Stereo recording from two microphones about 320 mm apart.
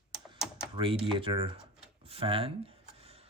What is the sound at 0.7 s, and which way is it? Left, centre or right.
Speech, centre.